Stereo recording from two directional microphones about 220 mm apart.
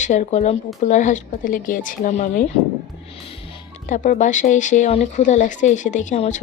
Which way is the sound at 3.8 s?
35° left (ahead or behind).